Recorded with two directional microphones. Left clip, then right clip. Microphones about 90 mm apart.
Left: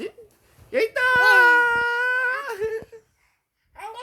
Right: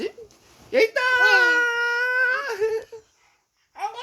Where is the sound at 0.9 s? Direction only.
65° left (ahead or behind); by 2.7 s 40° left (ahead or behind).